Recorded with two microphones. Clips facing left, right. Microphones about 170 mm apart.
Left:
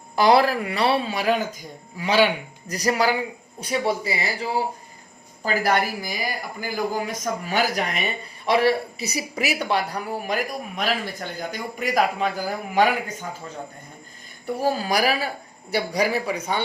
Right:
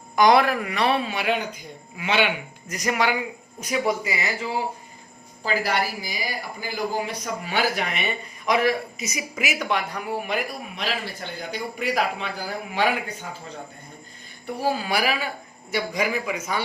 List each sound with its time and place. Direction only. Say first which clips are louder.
0.2 s speech: even; 30° left (ahead or behind)
5.5 s a man's voice: left 3 dB; 50° left (ahead or behind)
14.4 s speech: left 2 dB; 40° left (ahead or behind)